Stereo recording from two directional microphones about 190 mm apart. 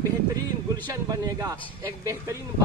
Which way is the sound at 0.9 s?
15° right (ahead or behind).